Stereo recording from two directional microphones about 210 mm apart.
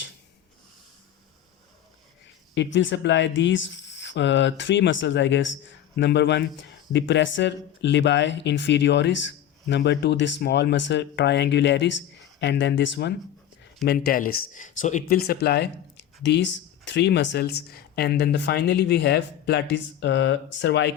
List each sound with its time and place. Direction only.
2.6 s speech: 60° left (ahead or behind)
13.8 s speech: 45° left (ahead or behind)